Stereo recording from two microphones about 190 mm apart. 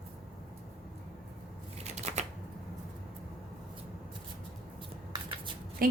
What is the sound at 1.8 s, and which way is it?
Shuffling cards, 35° right (ahead or behind).